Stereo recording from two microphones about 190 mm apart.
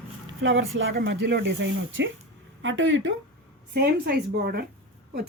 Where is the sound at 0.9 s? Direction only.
65° right (ahead or behind).